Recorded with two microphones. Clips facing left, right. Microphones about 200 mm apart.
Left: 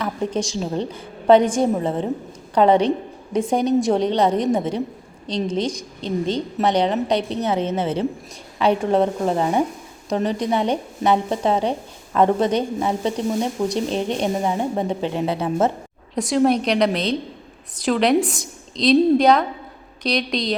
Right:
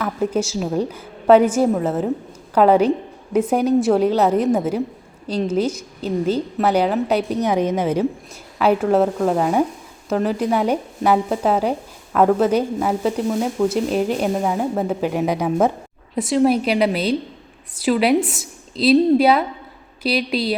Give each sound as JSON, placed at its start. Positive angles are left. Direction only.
{"t": 0.0, "sound": "a woman's voice", "side_deg": -5}